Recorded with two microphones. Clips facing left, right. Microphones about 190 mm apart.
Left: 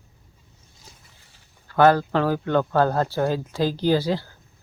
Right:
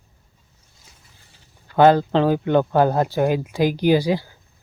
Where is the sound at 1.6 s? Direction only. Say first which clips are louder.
Right 3 dB; 20° right (ahead or behind).